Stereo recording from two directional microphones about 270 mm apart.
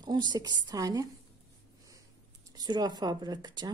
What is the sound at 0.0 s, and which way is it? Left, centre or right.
Speech, centre.